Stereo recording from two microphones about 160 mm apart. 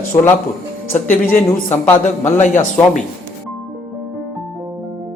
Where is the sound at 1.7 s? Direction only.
15° left (ahead or behind).